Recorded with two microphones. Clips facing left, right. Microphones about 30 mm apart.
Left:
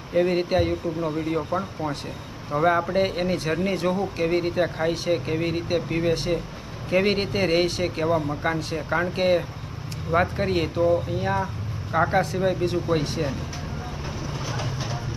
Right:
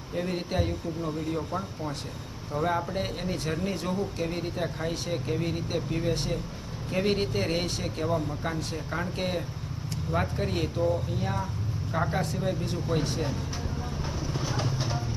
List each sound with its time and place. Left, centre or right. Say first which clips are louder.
0.1 s speech: left 10 dB; left